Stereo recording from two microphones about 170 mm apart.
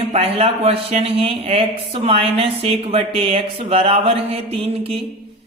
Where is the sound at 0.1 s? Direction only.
35° right (ahead or behind).